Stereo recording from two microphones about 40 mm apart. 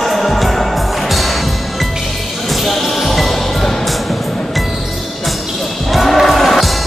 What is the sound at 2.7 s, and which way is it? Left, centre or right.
Music, centre.